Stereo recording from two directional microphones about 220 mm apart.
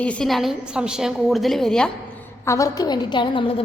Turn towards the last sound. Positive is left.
turn(degrees=25)  # may be behind; listen again after turning